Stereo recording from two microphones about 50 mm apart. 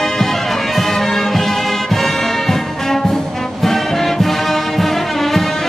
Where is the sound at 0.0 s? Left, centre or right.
Centre.